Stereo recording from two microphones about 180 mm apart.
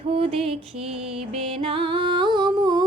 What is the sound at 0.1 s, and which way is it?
Music, 35° right (ahead or behind).